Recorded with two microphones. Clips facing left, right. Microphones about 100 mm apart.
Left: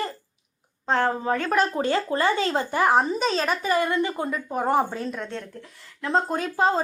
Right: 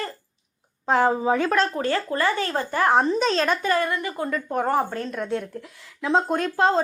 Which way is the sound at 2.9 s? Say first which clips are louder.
Right 4 dB; centre (ahead or behind).